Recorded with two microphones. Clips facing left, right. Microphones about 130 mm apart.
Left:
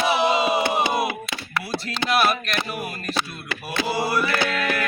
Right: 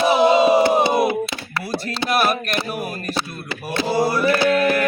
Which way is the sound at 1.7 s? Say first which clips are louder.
Right 3 dB; 40° right (ahead or behind).